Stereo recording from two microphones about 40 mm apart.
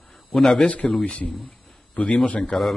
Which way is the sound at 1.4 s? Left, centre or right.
Left.